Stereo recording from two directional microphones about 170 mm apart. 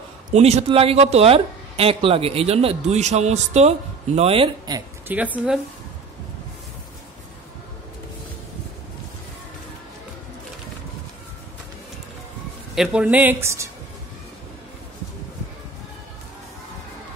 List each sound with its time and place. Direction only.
0.3 s speech: 40° right (ahead or behind)
5.0 s speech: 10° right (ahead or behind)
12.7 s speech: 5° right (ahead or behind)